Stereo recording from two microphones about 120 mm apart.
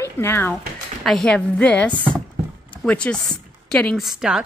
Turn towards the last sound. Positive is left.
turn(degrees=-5)  # may be behind; listen again after turning